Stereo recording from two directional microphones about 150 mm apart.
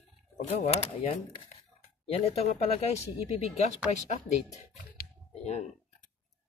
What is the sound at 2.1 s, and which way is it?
Speech, 45° left (ahead or behind).